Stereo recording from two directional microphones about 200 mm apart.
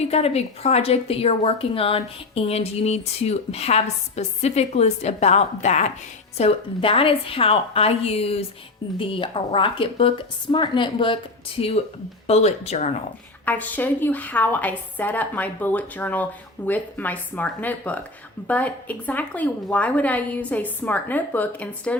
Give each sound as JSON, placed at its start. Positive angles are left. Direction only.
{"t": 0.1, "sound": "a woman's voice", "side_deg": 30}
{"t": 13.4, "sound": "a woman's voice", "side_deg": 10}